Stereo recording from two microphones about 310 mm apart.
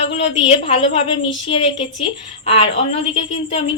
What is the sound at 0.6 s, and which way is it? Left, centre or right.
A woman's voice, centre.